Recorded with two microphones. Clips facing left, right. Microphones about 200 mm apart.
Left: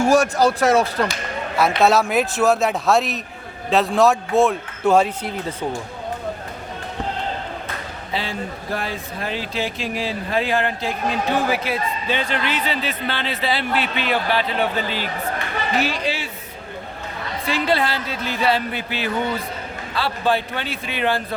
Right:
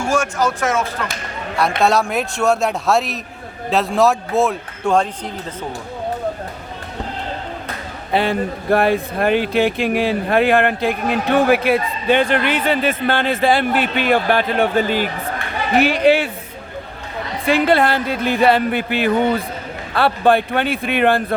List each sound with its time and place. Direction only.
0.0 s speech: 40° left (ahead or behind)
1.8 s a man's voice: centre (ahead or behind)
8.1 s speech: 60° right (ahead or behind)
17.4 s speech: 55° right (ahead or behind)